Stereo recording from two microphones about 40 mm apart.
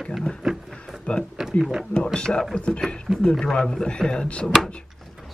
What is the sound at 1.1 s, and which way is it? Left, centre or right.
Speech, left.